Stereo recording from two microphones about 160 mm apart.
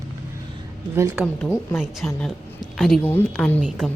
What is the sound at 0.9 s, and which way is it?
Speech, 15° right (ahead or behind).